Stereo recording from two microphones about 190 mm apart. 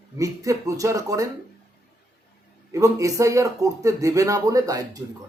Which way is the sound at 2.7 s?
15° right (ahead or behind).